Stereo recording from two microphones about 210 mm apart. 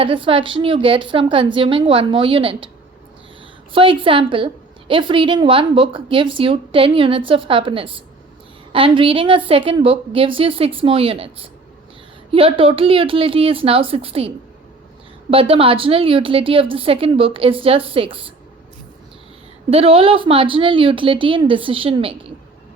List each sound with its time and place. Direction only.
0.0 s a woman's voice: 25° right (ahead or behind)
3.7 s a woman's voice: 25° right (ahead or behind)
15.3 s a woman's voice: 25° right (ahead or behind)
19.7 s a woman's voice: 25° right (ahead or behind)